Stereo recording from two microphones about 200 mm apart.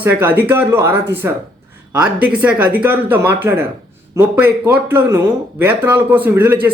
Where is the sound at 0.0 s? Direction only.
10° right (ahead or behind).